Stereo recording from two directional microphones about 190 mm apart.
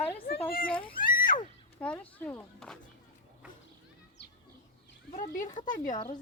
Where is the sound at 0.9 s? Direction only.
45° left (ahead or behind).